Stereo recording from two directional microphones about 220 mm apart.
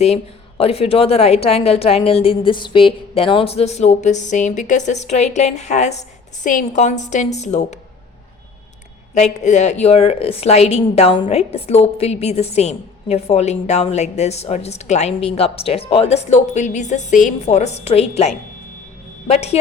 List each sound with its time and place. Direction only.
0.0 s a woman's voice: 30° left (ahead or behind)
9.1 s a woman's voice: 30° left (ahead or behind)